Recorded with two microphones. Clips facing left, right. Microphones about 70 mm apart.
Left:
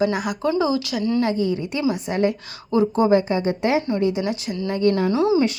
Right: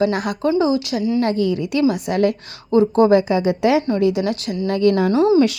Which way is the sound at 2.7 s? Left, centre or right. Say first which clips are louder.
Right 4 dB; right.